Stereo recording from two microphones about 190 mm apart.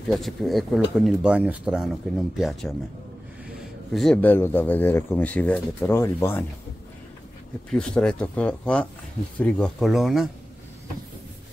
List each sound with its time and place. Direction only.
0.1 s speech: centre (ahead or behind)
3.9 s speech: 5° left (ahead or behind)
7.7 s speech: 5° left (ahead or behind)